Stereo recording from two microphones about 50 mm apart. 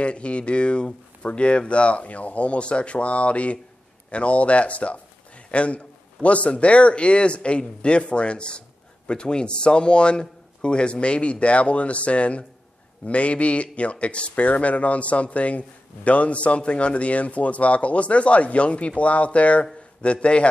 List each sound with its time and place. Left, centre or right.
0.0 s a man's voice: left